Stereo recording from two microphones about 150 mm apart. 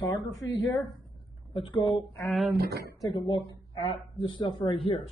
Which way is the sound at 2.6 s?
90° right.